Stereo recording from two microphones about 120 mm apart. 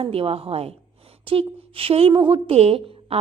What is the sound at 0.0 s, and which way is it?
A woman's voice, 50° right (ahead or behind).